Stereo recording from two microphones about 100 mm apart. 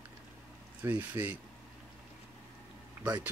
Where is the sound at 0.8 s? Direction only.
20° right (ahead or behind).